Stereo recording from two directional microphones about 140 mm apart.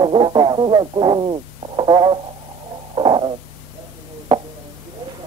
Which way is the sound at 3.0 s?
35° right (ahead or behind).